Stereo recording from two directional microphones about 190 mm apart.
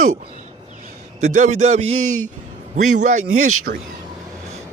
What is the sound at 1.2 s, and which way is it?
A man's voice, 40° right (ahead or behind).